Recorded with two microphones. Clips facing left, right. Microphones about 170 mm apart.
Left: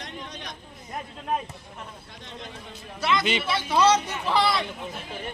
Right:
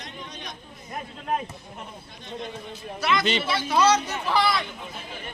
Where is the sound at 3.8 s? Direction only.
25° left (ahead or behind).